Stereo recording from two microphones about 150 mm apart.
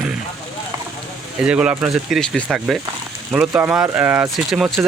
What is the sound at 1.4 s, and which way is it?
Speech, 5° right (ahead or behind).